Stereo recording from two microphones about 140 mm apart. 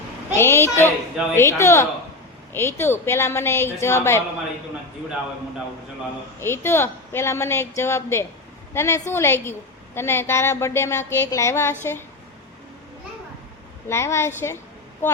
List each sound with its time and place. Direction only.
0.3 s a woman's voice: 15° left (ahead or behind)
6.4 s a woman's voice: 15° left (ahead or behind)
13.8 s a woman's voice: 20° left (ahead or behind)